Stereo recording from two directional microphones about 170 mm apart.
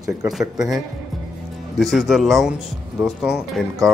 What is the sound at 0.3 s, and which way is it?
Speech, centre (ahead or behind).